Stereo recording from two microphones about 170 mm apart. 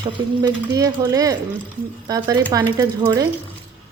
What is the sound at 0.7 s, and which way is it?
A woman's voice, 20° right (ahead or behind).